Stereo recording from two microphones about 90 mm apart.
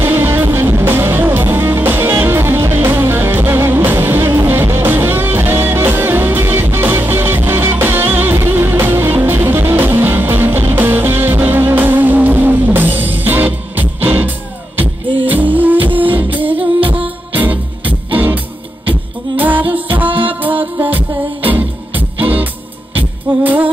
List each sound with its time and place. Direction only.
0.0 s music: 25° right (ahead or behind)
18.9 s beatboxing: 20° right (ahead or behind)
20.2 s music: 20° right (ahead or behind)